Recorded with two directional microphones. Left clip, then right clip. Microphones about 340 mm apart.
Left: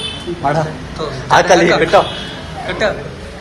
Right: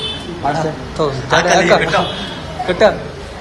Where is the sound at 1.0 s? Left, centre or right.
Centre.